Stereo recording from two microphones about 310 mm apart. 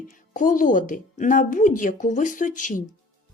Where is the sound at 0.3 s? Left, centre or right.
Left.